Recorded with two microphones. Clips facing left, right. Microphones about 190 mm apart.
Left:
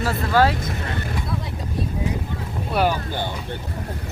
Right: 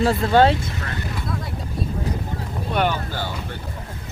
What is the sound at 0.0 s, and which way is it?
Speech, 25° right (ahead or behind).